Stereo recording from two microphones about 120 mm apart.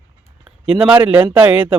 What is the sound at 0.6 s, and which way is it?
A man's voice, 10° right (ahead or behind).